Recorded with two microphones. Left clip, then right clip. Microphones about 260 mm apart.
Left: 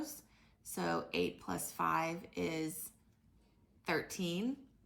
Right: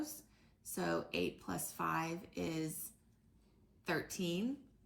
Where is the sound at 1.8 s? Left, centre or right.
Left.